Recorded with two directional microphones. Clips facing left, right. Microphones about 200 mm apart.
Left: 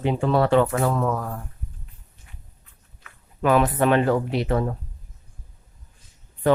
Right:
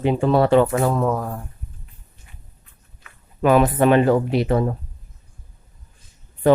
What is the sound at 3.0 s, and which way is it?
Speech, 15° right (ahead or behind).